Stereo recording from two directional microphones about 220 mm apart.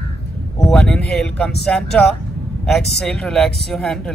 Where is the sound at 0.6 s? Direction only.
Centre (ahead or behind).